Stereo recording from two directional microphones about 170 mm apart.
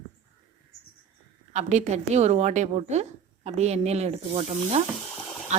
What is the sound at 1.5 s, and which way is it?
A woman's voice, 40° right (ahead or behind).